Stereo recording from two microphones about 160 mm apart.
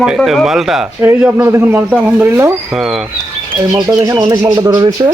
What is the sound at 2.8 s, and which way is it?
Speech, centre (ahead or behind).